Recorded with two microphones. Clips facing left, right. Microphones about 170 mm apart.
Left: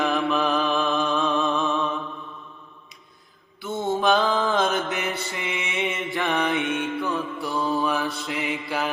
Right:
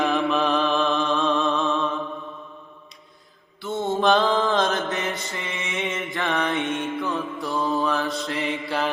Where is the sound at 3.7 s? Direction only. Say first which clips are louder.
Right 1 dB; centre (ahead or behind).